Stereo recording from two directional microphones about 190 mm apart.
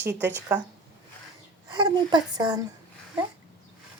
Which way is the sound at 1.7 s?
25° right (ahead or behind).